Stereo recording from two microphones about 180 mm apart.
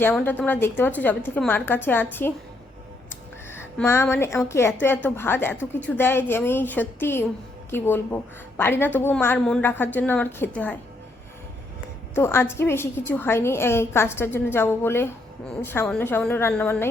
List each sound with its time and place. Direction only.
0.1 s a woman's voice: 10° left (ahead or behind)
3.5 s a woman's voice: 15° left (ahead or behind)
12.1 s a woman's voice: 15° left (ahead or behind)